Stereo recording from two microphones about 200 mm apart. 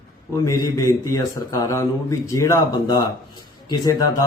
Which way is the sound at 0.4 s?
15° left (ahead or behind).